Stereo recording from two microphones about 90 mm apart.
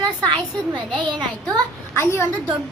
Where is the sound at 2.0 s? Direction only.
30° left (ahead or behind).